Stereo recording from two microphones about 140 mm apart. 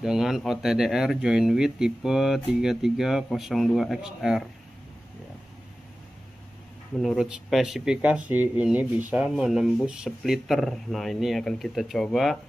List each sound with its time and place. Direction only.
0.0 s speech: 5° right (ahead or behind)
7.0 s speech: centre (ahead or behind)